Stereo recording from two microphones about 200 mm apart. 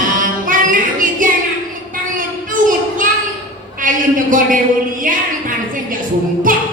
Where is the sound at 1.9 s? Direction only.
40° right (ahead or behind).